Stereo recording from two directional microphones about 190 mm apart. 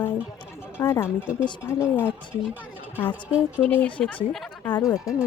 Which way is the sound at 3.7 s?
10° left (ahead or behind).